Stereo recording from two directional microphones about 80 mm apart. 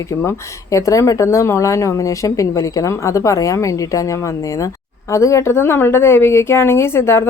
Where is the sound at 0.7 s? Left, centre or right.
Left.